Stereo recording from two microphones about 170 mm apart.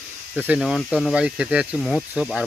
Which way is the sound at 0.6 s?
Centre (ahead or behind).